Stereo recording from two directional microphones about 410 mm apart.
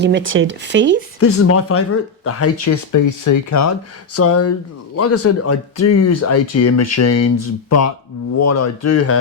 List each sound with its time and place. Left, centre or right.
0.0 s speech: right
1.2 s speech: left